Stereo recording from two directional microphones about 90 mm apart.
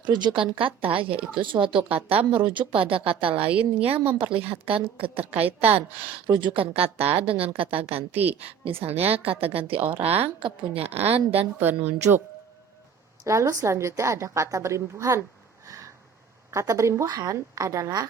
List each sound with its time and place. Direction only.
0.0 s speech: 55° right (ahead or behind)
0.6 s a woman's voice: 85° right
1.4 s a woman's voice: 70° right (ahead or behind); by 5.2 s 90° right
5.2 s a woman's voice: 15° right (ahead or behind)
5.6 s speech: 85° right
11.6 s a woman's voice: 25° right (ahead or behind)
13.2 s a woman's voice: 35° right (ahead or behind)
16.5 s a woman's voice: 35° right (ahead or behind)